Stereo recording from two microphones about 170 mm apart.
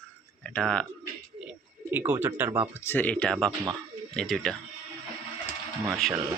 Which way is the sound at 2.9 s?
10° left (ahead or behind).